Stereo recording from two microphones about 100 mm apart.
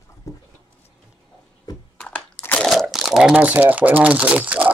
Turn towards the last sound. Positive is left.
turn(degrees=-15)  # may be behind; listen again after turning